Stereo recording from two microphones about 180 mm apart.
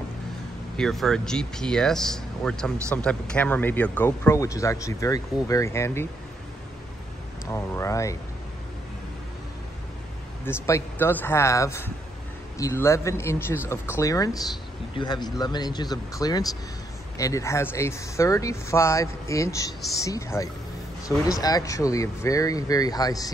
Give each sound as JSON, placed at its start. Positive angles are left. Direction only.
{"t": 0.7, "sound": "speech", "side_deg": 5}
{"t": 7.5, "sound": "speech", "side_deg": 15}
{"t": 10.4, "sound": "speech", "side_deg": 15}